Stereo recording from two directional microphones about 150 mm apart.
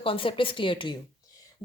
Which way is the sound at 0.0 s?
35° left (ahead or behind).